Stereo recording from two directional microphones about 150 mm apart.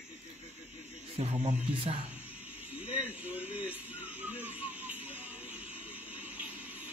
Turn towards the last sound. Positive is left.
turn(degrees=-10)  # may be behind; listen again after turning